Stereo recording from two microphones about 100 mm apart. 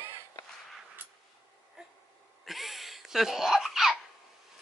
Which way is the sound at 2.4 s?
Centre (ahead or behind).